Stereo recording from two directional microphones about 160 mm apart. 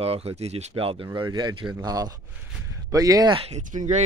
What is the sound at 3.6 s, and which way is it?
Speech, 50° right (ahead or behind).